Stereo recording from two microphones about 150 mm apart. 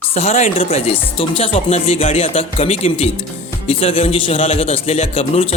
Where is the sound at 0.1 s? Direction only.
45° left (ahead or behind).